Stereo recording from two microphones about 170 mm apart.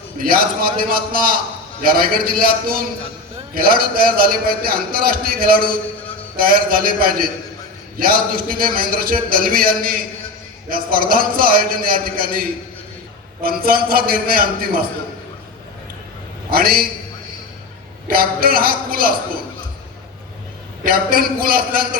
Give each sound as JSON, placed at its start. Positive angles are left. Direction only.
{"t": 0.2, "sound": "a man's voice", "side_deg": -55}
{"t": 16.5, "sound": "a man's voice", "side_deg": -60}
{"t": 18.1, "sound": "a man's voice", "side_deg": -60}
{"t": 20.8, "sound": "a man's voice", "side_deg": -60}